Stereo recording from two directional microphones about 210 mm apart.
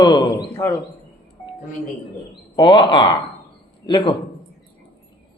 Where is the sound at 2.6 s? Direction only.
20° left (ahead or behind).